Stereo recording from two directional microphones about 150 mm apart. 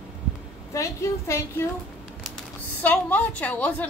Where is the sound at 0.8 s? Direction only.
20° left (ahead or behind).